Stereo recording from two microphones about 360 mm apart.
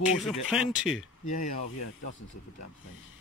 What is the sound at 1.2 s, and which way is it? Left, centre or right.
Speech, left.